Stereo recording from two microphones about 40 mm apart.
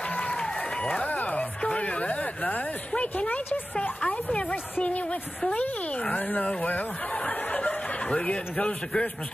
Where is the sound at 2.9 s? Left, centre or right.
Left.